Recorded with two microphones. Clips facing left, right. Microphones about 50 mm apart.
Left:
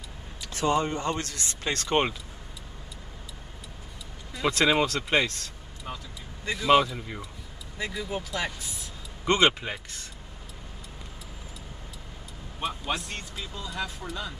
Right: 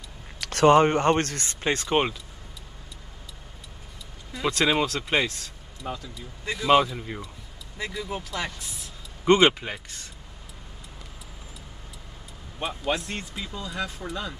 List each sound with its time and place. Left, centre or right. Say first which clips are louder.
0.4 s speech: right 8 dB; right
1.6 s speech: right 5 dB; right
1.9 s speech: even; centre
4.3 s speech: even; centre
12.5 s a man's voice: right 3 dB; centre
13.6 s speech: right 2 dB; centre